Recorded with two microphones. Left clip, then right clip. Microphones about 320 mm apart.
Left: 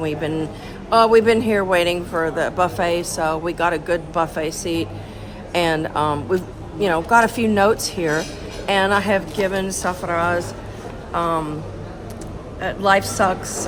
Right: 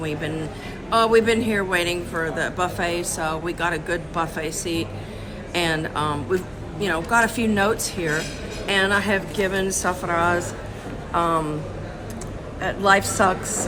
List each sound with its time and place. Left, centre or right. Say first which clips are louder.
0.0 s a woman's voice: left 5 dB; centre
12.5 s a man's voice: left 1 dB; centre